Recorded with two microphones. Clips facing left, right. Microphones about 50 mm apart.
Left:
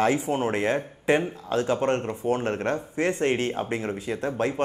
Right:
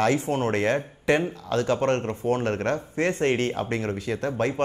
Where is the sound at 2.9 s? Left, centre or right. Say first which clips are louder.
Right 1 dB; right.